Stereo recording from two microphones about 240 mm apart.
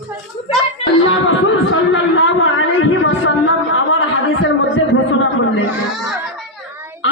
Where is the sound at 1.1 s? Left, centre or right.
Left.